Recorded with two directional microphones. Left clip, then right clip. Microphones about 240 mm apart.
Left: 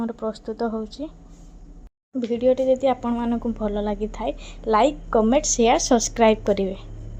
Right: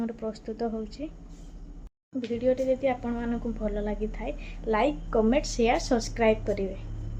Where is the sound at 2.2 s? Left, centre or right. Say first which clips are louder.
Left 7 dB; left.